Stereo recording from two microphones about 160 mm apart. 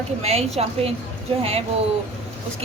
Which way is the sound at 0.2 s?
40° right (ahead or behind).